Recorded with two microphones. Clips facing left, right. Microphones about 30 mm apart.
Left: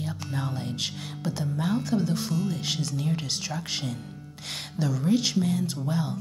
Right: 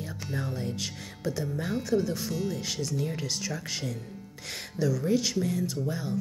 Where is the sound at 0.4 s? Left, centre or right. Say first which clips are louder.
Left 2 dB; left.